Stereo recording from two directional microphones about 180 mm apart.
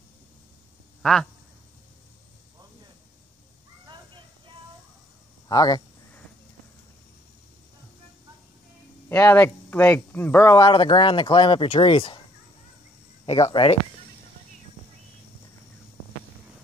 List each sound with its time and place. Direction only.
1.0 s speech: 5° left (ahead or behind)
3.8 s a sound: 25° right (ahead or behind)
5.5 s speech: 20° left (ahead or behind)
9.1 s speech: 10° left (ahead or behind)
10.6 s speech: 25° left (ahead or behind)
13.2 s speech: 30° left (ahead or behind)